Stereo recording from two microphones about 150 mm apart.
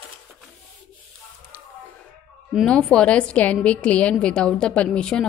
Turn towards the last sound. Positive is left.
turn(degrees=5)  # may be behind; listen again after turning